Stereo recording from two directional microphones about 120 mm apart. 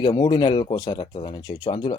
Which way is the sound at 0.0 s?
40° left (ahead or behind).